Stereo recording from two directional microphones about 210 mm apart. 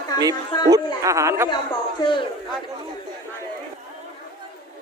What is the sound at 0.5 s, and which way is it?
Speech, 20° left (ahead or behind).